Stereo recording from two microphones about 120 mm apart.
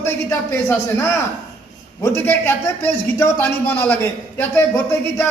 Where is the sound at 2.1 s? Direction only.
20° left (ahead or behind).